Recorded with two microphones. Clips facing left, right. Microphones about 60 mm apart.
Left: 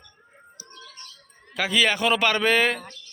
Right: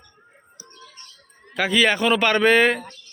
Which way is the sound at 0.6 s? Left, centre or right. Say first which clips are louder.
Even; right.